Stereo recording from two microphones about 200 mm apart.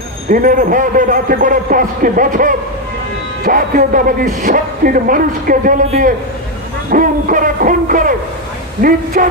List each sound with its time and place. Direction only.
0.3 s speech: 45° right (ahead or behind)